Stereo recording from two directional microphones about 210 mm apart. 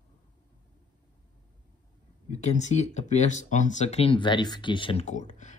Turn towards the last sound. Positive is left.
turn(degrees=35)  # may be behind; listen again after turning